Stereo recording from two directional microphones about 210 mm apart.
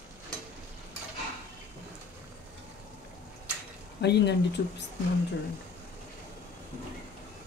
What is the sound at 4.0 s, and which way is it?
Speech, 55° left (ahead or behind).